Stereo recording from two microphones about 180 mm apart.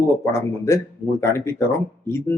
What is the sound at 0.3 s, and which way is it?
Speech, 15° left (ahead or behind).